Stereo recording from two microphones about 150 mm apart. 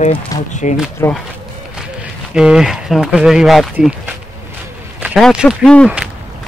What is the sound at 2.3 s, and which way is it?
Speech, 5° right (ahead or behind).